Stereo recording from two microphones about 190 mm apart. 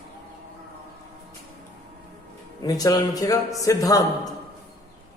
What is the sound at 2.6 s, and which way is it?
Speech, 20° left (ahead or behind).